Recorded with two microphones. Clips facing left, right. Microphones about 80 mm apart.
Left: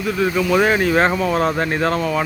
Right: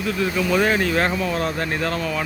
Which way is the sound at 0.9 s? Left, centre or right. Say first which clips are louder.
Left 5 dB; left.